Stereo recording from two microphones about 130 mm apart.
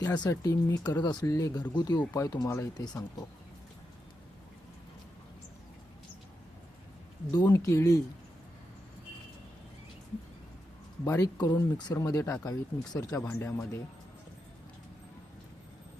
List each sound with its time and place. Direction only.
0.0 s speech: 30° left (ahead or behind)
7.4 s speech: 20° left (ahead or behind)
11.0 s speech: 25° left (ahead or behind)